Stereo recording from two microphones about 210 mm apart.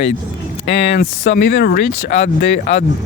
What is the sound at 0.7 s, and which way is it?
Speech, 55° left (ahead or behind).